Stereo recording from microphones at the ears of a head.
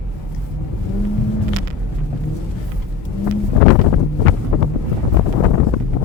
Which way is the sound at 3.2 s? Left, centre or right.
Left.